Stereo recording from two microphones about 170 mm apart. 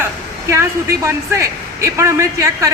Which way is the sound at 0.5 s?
15° right (ahead or behind).